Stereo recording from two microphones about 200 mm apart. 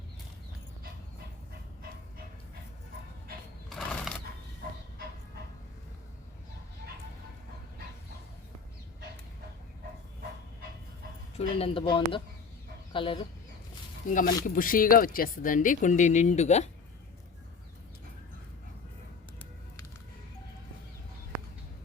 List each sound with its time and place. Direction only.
3.8 s horse: centre (ahead or behind)
11.3 s speech: 30° left (ahead or behind)
14.1 s speech: 40° left (ahead or behind)